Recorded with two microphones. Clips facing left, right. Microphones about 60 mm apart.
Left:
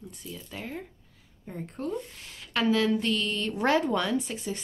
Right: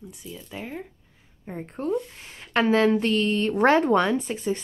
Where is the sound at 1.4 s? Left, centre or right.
Right.